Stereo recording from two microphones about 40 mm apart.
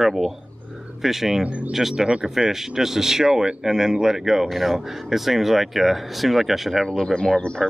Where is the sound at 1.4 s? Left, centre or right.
Right.